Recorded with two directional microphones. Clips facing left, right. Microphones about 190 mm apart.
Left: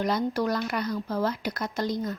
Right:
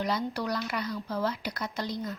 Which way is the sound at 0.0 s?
50° left (ahead or behind).